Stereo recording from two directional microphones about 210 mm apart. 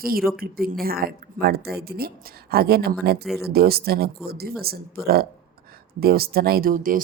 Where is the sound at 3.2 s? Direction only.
Centre (ahead or behind).